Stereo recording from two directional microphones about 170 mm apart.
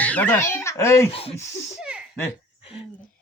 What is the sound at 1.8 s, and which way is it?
Baby laughter, 5° right (ahead or behind).